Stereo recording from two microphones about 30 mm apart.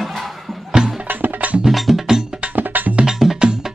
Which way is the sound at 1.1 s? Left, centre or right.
Right.